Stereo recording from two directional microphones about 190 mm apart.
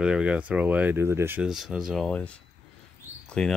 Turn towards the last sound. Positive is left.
turn(degrees=5)  # may be behind; listen again after turning